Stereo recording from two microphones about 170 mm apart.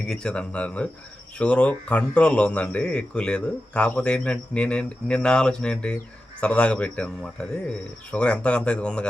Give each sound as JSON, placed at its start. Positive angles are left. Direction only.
{"t": 0.0, "sound": "speech", "side_deg": 5}